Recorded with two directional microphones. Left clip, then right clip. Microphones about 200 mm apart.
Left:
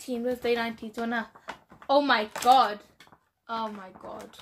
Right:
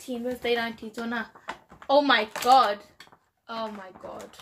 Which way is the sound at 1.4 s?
5° right (ahead or behind).